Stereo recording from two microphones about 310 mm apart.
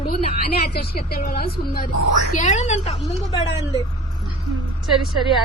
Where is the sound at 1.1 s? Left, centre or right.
Left.